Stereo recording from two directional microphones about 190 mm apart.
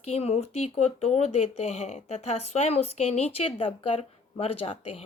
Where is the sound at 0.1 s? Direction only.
35° left (ahead or behind).